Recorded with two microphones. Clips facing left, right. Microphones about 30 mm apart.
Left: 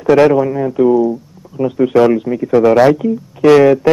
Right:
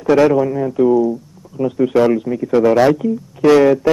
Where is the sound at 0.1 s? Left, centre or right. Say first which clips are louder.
Left 3 dB; centre.